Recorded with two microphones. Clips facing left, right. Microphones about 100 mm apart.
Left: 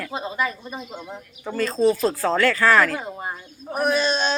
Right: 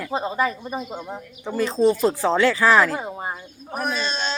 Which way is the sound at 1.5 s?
20° right (ahead or behind).